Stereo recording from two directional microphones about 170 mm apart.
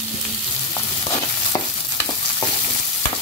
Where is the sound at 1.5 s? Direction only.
20° left (ahead or behind).